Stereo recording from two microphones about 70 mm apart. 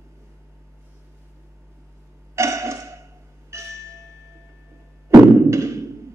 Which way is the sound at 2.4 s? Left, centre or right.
Right.